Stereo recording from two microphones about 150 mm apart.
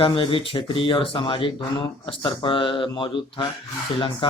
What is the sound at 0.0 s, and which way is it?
Speech, 35° left (ahead or behind).